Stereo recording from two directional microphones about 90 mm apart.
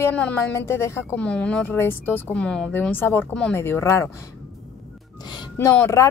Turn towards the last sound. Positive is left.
turn(degrees=35)  # may be behind; listen again after turning